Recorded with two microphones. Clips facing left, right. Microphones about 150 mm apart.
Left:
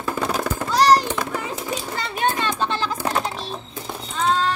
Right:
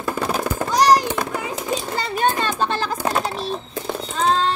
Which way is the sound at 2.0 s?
40° right (ahead or behind).